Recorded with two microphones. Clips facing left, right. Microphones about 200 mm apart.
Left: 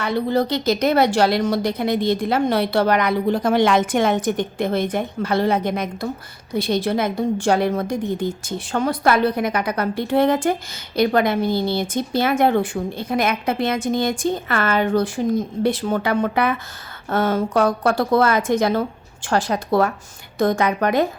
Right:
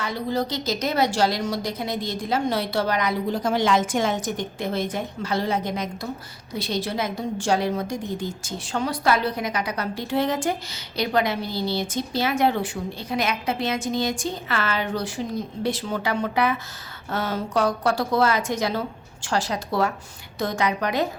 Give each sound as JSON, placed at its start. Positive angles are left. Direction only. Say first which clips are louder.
{"t": 0.0, "sound": "a woman's voice", "louder": "left 6 dB", "side_deg": 60}